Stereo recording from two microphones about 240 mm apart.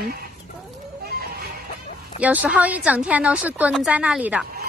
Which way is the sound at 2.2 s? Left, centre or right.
Centre.